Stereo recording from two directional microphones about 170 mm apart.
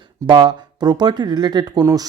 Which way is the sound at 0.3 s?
25° right (ahead or behind).